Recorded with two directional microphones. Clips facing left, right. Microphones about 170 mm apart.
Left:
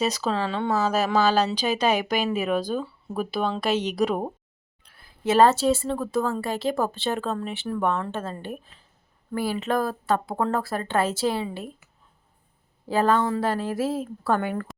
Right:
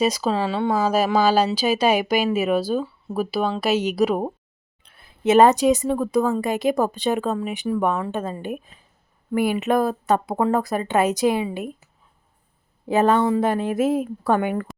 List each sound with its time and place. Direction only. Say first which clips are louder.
0.0 s speech: right 4 dB; 10° right (ahead or behind)
4.9 s speech: right 5 dB; 20° right (ahead or behind)
12.8 s speech: right 4 dB; 20° right (ahead or behind)